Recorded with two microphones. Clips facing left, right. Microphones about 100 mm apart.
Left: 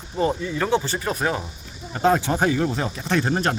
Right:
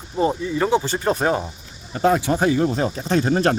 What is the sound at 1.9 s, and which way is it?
Speech, 35° left (ahead or behind).